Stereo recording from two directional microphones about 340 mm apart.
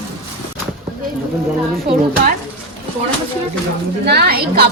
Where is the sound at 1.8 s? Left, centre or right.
Right.